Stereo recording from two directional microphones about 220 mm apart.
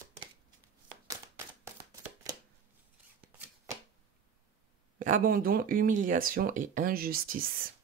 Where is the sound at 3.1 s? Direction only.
5° right (ahead or behind).